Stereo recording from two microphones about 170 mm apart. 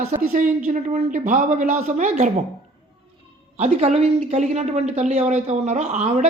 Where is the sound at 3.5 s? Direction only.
40° right (ahead or behind).